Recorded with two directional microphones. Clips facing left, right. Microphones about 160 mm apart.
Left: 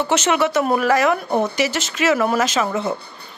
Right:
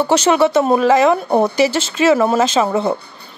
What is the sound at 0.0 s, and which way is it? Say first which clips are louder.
A woman's voice: right 5 dB; 35° right (ahead or behind).